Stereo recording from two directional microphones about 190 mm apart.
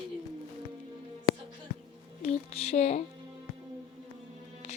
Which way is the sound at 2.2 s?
35° left (ahead or behind).